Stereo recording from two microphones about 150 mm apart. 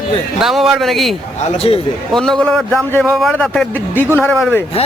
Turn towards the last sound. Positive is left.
turn(degrees=0)  # may be behind; listen again after turning